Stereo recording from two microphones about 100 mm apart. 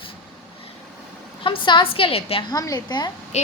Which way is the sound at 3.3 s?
90° left.